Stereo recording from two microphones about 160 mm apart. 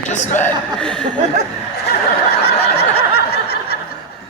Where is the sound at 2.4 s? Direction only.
80° left.